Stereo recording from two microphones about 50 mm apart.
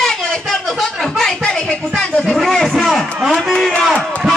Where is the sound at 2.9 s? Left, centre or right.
Centre.